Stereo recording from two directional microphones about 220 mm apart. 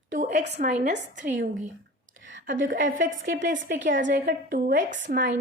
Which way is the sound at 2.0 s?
60° right (ahead or behind).